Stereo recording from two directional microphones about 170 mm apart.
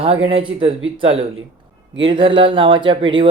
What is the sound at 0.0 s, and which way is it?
Speech, 35° right (ahead or behind).